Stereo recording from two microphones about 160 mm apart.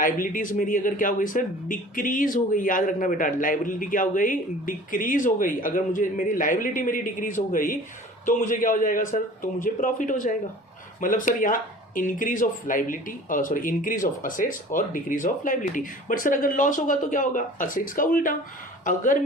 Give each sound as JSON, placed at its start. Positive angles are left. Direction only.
{"t": 0.0, "sound": "speech", "side_deg": 60}